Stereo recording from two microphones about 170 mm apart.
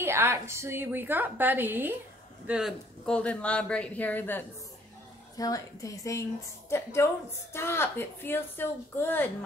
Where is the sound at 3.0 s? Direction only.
5° left (ahead or behind).